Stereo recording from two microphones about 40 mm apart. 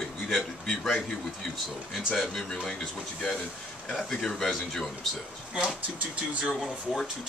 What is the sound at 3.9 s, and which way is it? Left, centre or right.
A man's voice, centre.